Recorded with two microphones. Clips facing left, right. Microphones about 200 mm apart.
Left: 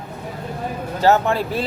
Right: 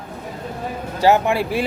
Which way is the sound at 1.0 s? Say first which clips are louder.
Right 1 dB; 10° right (ahead or behind).